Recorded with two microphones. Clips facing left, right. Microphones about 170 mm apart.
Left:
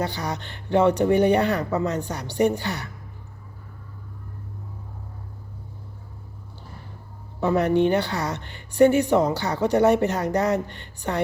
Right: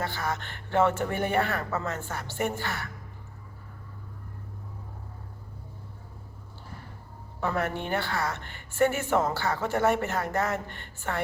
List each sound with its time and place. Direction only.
0.0 s speech: 20° left (ahead or behind)
7.4 s speech: 20° left (ahead or behind)